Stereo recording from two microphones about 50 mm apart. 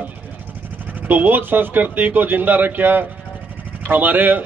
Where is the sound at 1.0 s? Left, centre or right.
Right.